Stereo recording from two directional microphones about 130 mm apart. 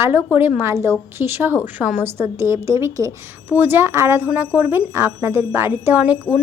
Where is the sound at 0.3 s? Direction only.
15° right (ahead or behind).